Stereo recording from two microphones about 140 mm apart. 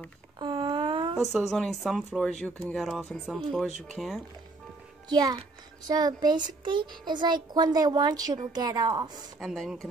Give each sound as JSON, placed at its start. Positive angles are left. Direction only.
{"t": 0.4, "sound": "a sound", "side_deg": -35}
{"t": 1.2, "sound": "speech", "side_deg": 0}
{"t": 5.1, "sound": "a child's voice", "side_deg": -30}
{"t": 9.4, "sound": "speech", "side_deg": 0}